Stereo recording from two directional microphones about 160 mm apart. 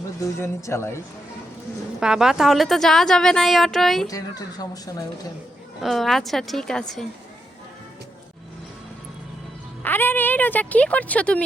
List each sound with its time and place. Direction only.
0.3 s speech: 15° left (ahead or behind)
2.0 s a woman's voice: 5° right (ahead or behind)
4.0 s a woman's voice: 25° left (ahead or behind)
5.8 s a woman's voice: centre (ahead or behind)
9.8 s speech: 10° left (ahead or behind)